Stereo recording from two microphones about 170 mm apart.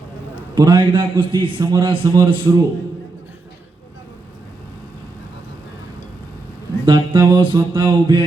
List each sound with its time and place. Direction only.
0.5 s a man's voice: 25° right (ahead or behind)
6.8 s a man's voice: 30° right (ahead or behind)